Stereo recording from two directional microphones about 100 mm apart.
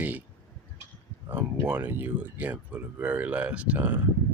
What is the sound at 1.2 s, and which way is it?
Speech, 20° right (ahead or behind).